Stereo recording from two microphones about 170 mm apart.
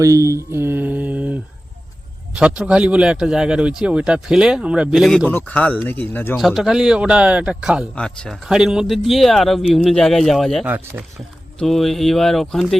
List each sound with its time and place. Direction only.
0.0 s mantra: 20° right (ahead or behind)
2.3 s speech: 5° right (ahead or behind); by 6.4 s 10° left (ahead or behind)
6.4 s speech: centre (ahead or behind)
7.9 s speech: 5° left (ahead or behind)
10.7 s speech: 10° right (ahead or behind)
11.6 s speech: centre (ahead or behind)